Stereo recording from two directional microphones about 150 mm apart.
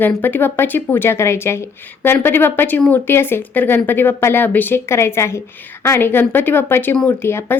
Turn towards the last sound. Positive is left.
turn(degrees=15)  # may be behind; listen again after turning